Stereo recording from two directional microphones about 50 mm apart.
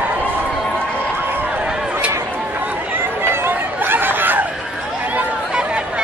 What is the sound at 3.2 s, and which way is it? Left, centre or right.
Chatter, right.